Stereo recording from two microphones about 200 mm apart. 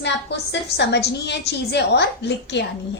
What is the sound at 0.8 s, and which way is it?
A woman's voice, 60° left (ahead or behind).